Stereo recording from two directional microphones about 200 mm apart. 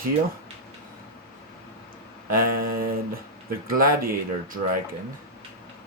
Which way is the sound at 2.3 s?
45° right (ahead or behind).